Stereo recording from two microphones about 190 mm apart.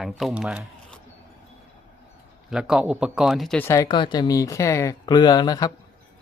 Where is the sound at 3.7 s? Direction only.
20° left (ahead or behind).